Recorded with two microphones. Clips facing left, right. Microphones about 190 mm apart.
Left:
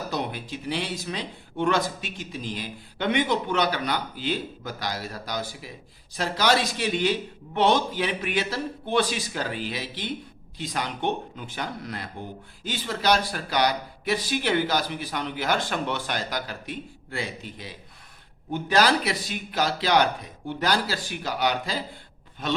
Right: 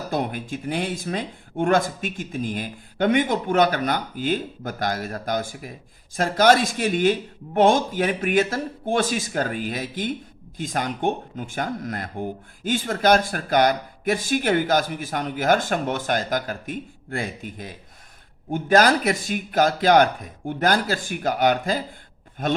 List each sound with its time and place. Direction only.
0.1 s speech: 50° right (ahead or behind)